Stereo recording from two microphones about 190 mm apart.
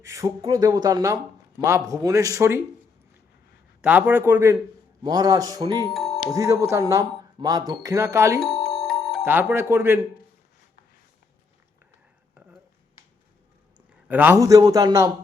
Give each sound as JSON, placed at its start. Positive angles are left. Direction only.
{"t": 0.0, "sound": "speech", "side_deg": -15}
{"t": 3.8, "sound": "speech", "side_deg": -5}
{"t": 5.9, "sound": "music", "side_deg": 0}
{"t": 6.3, "sound": "speech", "side_deg": -15}
{"t": 8.4, "sound": "music", "side_deg": 0}
{"t": 9.2, "sound": "speech", "side_deg": -10}
{"t": 13.7, "sound": "a man's voice", "side_deg": -10}